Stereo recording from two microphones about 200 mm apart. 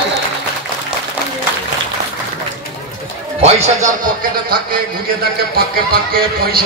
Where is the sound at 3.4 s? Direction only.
30° right (ahead or behind).